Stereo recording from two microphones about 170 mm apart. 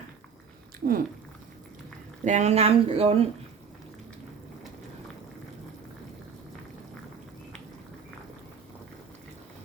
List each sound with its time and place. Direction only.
0.8 s speech: 55° right (ahead or behind)
2.2 s speech: 45° right (ahead or behind)